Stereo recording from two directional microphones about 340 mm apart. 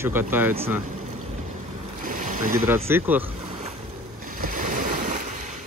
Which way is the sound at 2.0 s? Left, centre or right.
Right.